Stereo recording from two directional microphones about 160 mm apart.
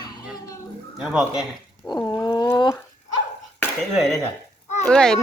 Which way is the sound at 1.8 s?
25° left (ahead or behind).